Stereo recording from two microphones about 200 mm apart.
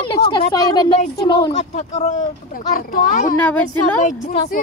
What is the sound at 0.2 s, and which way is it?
A woman's voice, 25° left (ahead or behind).